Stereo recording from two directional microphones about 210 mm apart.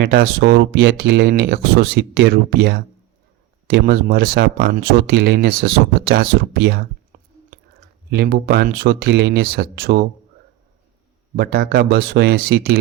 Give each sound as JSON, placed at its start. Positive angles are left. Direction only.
{"t": 0.0, "sound": "speech", "side_deg": -50}
{"t": 11.3, "sound": "speech", "side_deg": -50}